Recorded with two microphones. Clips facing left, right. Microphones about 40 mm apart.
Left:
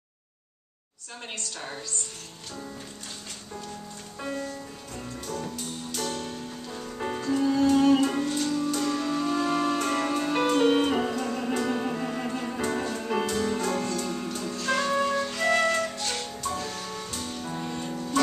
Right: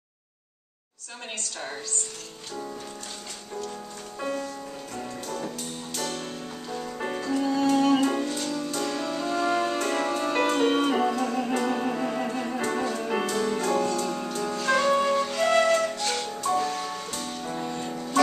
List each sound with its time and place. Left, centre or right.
4.2 s music: centre
14.7 s flute: centre
16.3 s music: centre
16.6 s music: right
17.1 s music: centre